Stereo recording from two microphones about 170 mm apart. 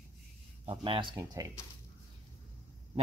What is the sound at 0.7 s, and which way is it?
Speech, 30° right (ahead or behind).